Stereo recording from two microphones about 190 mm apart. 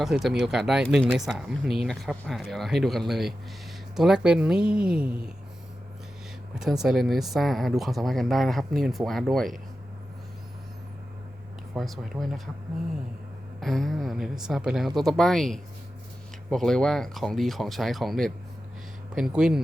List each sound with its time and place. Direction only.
0.0 s speech: centre (ahead or behind)
6.5 s speech: centre (ahead or behind)
11.7 s speech: centre (ahead or behind)
13.6 s speech: centre (ahead or behind)